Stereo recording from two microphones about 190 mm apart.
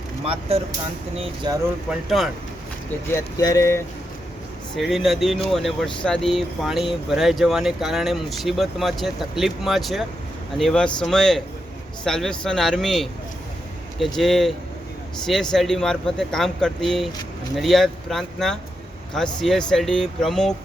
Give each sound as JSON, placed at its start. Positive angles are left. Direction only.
{"t": 0.3, "sound": "speech", "side_deg": -30}
{"t": 1.9, "sound": "speech", "side_deg": 0}
{"t": 3.1, "sound": "speech", "side_deg": 15}
{"t": 4.8, "sound": "speech", "side_deg": 0}
{"t": 14.2, "sound": "speech", "side_deg": 0}